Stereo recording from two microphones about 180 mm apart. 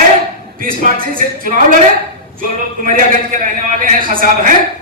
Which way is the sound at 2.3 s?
50° right (ahead or behind).